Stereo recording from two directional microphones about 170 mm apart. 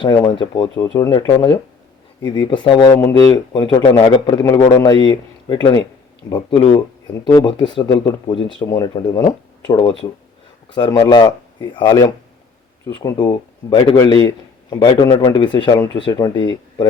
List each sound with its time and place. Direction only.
0.0 s speech: 30° left (ahead or behind)